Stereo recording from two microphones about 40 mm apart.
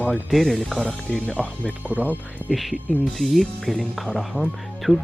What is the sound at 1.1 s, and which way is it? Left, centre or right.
Speech, left.